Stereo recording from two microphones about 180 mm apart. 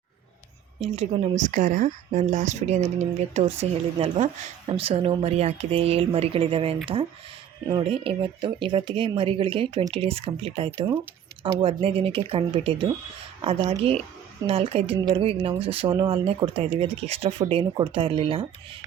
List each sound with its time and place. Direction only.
0.8 s speech: 40° right (ahead or behind)